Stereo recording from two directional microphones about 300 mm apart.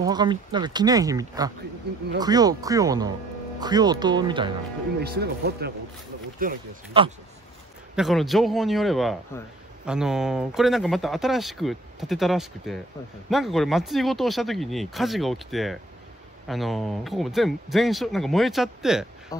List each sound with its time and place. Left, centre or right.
0.0 s speech: centre
5.0 s speech: right
6.4 s speech: centre
7.9 s speech: centre